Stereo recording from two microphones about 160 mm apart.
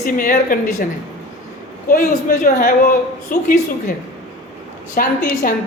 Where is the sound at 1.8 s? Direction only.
60° left (ahead or behind).